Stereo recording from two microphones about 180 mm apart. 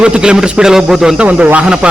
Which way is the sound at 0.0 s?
5° right (ahead or behind).